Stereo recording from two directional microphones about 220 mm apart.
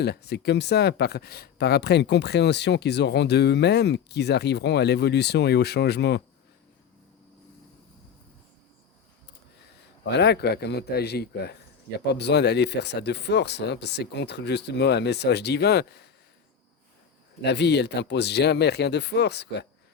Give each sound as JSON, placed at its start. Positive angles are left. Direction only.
{"t": 0.0, "sound": "speech", "side_deg": 50}
{"t": 10.1, "sound": "speech", "side_deg": 50}
{"t": 17.4, "sound": "speech", "side_deg": 50}